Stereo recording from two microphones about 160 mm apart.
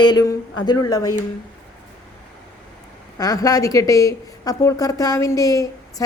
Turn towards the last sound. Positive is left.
turn(degrees=20)  # may be behind; listen again after turning